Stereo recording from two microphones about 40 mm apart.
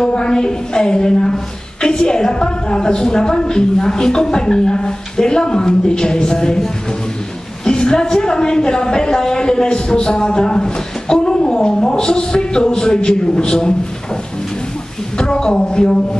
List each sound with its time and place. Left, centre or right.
0.0 s a woman's voice: left
7.6 s a woman's voice: left
15.1 s a woman's voice: left